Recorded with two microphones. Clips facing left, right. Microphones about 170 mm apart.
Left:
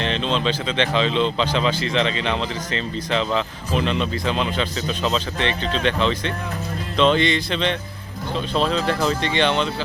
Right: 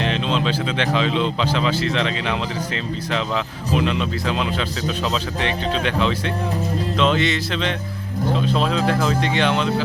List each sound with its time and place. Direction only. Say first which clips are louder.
0.0 s speech: right 1 dB; 5° right (ahead or behind)